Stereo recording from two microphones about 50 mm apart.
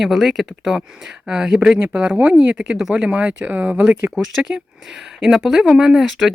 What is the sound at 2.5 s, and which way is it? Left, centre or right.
Speech, centre.